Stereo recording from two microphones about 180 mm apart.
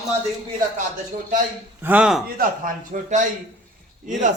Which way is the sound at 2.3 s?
45° right (ahead or behind).